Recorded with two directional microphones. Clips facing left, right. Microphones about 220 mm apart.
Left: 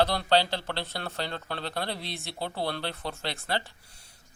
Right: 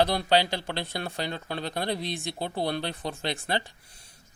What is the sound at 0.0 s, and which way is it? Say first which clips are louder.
Speech: right 1 dB; 15° right (ahead or behind).